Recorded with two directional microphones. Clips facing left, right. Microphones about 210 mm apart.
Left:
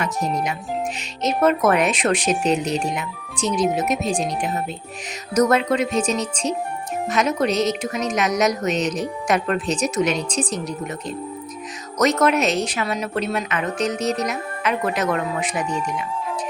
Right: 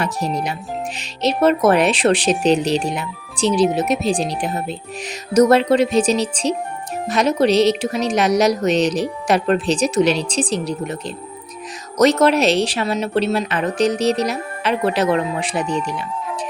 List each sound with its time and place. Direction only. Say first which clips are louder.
0.0 s speech: right 1 dB; 35° right (ahead or behind)